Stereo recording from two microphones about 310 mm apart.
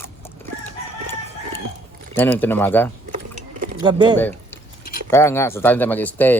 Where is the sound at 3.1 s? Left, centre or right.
Right.